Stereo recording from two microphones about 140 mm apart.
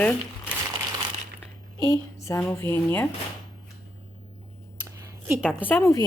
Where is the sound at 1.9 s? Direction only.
20° left (ahead or behind).